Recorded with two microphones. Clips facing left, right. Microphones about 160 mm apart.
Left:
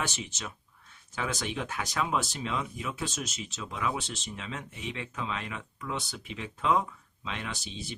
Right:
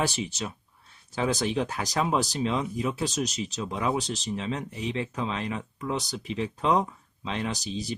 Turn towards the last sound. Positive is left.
turn(degrees=-40)  # may be behind; listen again after turning